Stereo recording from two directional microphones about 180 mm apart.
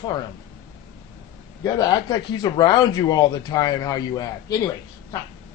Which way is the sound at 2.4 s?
25° left (ahead or behind).